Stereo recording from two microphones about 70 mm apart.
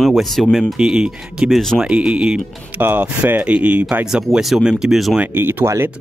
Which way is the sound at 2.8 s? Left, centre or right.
Right.